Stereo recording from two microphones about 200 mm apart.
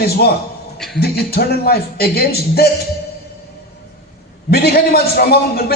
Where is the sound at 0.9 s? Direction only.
50° left (ahead or behind).